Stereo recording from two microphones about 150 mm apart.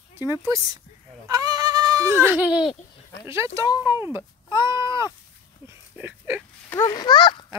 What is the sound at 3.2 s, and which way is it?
Speech, 20° right (ahead or behind).